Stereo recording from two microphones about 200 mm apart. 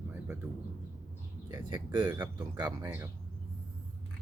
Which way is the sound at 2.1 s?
10° right (ahead or behind).